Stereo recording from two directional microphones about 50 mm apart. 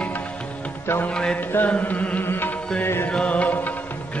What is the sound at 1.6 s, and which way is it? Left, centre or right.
Carnatic music, left.